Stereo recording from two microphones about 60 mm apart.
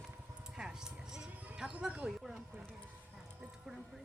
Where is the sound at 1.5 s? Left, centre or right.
Centre.